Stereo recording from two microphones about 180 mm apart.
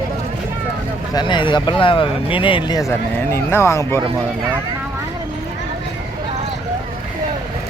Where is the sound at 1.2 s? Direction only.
25° left (ahead or behind).